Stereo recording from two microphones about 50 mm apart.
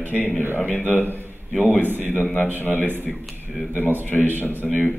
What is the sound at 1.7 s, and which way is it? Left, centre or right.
Speech, right.